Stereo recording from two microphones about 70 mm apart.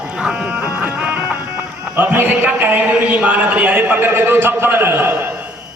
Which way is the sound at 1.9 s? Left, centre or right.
Right.